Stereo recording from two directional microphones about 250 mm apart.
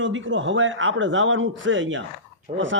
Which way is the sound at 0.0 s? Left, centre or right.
Right.